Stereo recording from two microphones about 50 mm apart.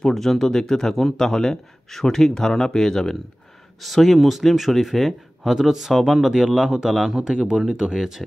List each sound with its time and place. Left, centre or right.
0.0 s speech: centre
7.2 s speech: centre